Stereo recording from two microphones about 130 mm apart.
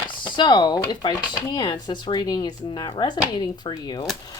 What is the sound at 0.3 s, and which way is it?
Speech, 35° left (ahead or behind).